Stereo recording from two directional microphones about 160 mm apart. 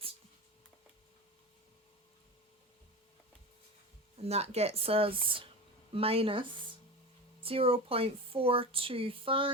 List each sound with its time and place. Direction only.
4.2 s speech: 40° right (ahead or behind)